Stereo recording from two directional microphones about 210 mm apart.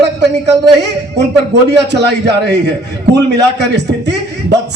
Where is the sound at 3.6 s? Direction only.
55° right (ahead or behind).